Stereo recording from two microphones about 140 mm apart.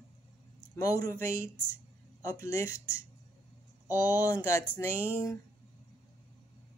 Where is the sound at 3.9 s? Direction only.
25° left (ahead or behind).